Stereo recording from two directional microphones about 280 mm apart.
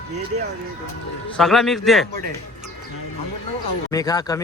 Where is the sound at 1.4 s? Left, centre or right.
Centre.